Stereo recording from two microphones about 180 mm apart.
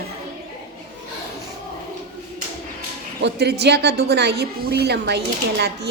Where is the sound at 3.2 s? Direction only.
65° right (ahead or behind).